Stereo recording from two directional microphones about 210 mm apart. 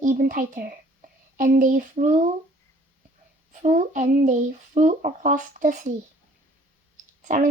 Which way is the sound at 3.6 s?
35° right (ahead or behind).